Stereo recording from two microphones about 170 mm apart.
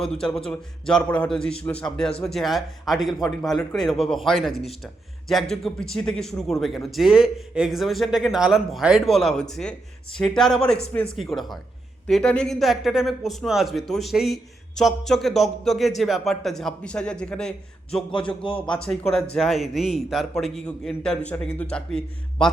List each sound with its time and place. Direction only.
0.0 s a man's voice: 5° left (ahead or behind)
18.4 s speech: 30° left (ahead or behind)
18.7 s a man's voice: 5° left (ahead or behind)